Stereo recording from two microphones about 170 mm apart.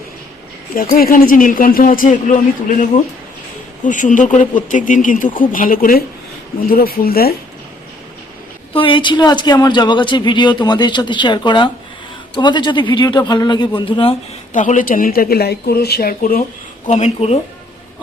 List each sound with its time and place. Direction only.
0.7 s a woman's voice: 60° left (ahead or behind)
3.8 s a woman's voice: 50° left (ahead or behind)
8.7 s speech: 30° left (ahead or behind)
14.5 s speech: 50° left (ahead or behind)
16.8 s speech: 35° left (ahead or behind)